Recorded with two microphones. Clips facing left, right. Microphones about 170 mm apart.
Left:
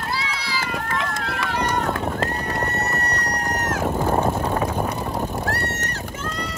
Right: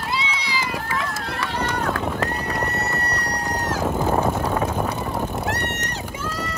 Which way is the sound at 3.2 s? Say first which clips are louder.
Even; 10° right (ahead or behind).